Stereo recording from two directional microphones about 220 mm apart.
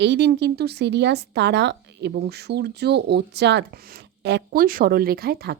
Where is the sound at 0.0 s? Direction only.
50° right (ahead or behind).